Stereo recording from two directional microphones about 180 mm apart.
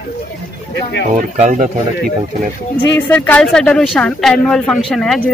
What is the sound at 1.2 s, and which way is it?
Speech, 45° right (ahead or behind).